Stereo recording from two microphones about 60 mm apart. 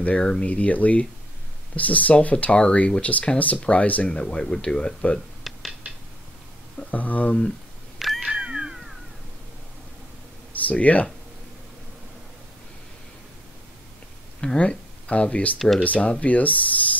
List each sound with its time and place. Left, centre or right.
0.0 s speech: centre
5.4 s a sound: centre
6.8 s speech: left
8.2 s cat: centre
10.5 s speech: left
14.4 s speech: centre